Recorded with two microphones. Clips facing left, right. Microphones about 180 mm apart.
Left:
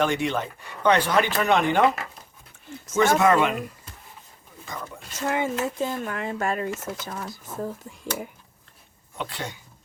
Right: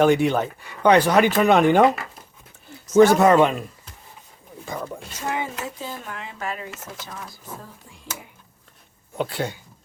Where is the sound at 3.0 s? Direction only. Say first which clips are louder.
Right 3 dB; 35° right (ahead or behind).